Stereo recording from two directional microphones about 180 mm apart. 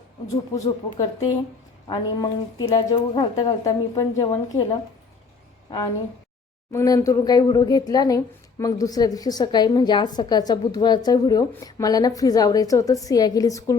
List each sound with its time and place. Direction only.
0.5 s speech: 20° left (ahead or behind)